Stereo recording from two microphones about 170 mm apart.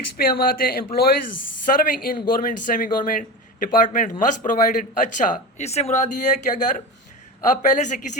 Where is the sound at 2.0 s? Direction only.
55° left (ahead or behind).